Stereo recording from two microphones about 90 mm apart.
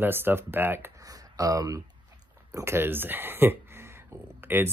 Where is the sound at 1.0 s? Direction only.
40° right (ahead or behind).